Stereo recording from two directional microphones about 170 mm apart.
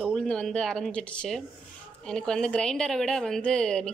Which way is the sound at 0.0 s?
Centre (ahead or behind).